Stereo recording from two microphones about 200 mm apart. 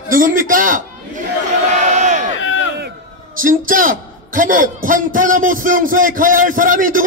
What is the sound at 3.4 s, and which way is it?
A man's voice, 40° right (ahead or behind).